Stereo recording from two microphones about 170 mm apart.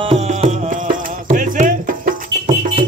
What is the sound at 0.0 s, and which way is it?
Music, 35° right (ahead or behind).